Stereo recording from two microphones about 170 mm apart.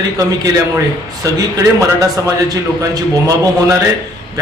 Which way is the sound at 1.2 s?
20° right (ahead or behind).